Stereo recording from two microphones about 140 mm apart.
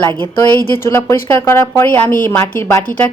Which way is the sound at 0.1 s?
35° right (ahead or behind).